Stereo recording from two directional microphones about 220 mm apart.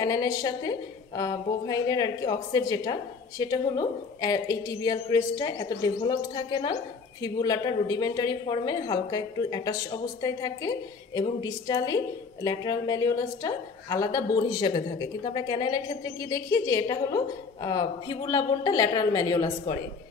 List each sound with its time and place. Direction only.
0.0 s a woman's voice: 15° left (ahead or behind)